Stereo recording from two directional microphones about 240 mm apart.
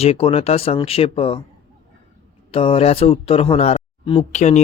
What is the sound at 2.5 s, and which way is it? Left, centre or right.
Speech, left.